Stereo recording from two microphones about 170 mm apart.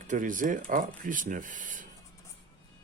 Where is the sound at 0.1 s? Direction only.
50° right (ahead or behind).